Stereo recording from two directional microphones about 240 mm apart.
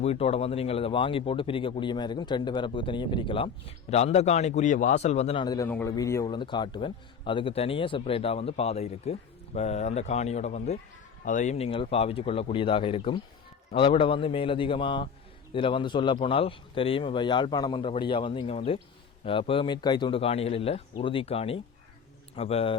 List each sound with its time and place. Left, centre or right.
0.0 s speech: left